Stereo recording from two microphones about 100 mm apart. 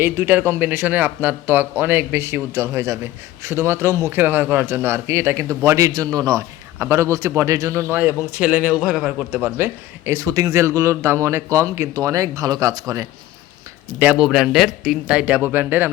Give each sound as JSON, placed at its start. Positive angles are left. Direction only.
{"t": 0.0, "sound": "speech", "side_deg": -20}
{"t": 9.3, "sound": "speech", "side_deg": -20}
{"t": 10.1, "sound": "speech", "side_deg": -30}
{"t": 14.0, "sound": "speech", "side_deg": -10}